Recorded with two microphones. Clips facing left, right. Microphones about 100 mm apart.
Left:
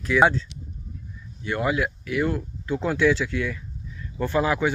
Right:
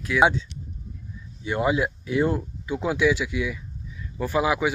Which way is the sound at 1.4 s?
20° right (ahead or behind).